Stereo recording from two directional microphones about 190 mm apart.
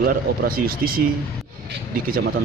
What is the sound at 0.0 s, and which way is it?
Speech, 50° right (ahead or behind).